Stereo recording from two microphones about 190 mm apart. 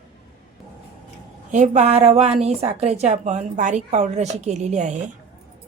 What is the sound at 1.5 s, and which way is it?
A woman's voice, 40° right (ahead or behind).